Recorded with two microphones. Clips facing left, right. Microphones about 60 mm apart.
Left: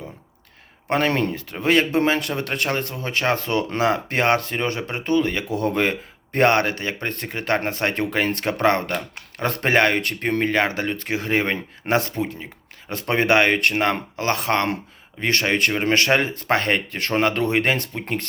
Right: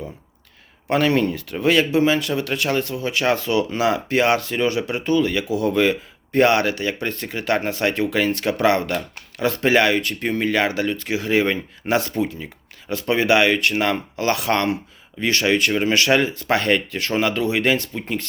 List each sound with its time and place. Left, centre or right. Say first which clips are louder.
0.9 s speech: right 2 dB; left
5.5 s speech: right 3 dB; left
15.2 s speech: right 2 dB; left
18.0 s speech: even; left